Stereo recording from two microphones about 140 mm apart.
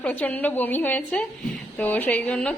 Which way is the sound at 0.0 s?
10° left (ahead or behind).